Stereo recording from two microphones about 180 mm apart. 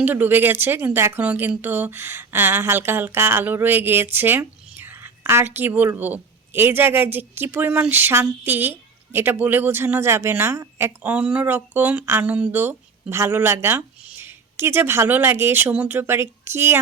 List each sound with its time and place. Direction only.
0.0 s a woman's voice: 10° right (ahead or behind)